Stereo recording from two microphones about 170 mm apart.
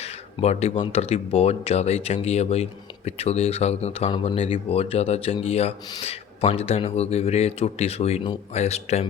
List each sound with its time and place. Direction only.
0.0 s speech: 40° left (ahead or behind)